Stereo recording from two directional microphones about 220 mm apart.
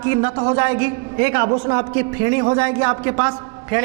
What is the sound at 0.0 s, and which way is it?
A man's voice, 15° right (ahead or behind).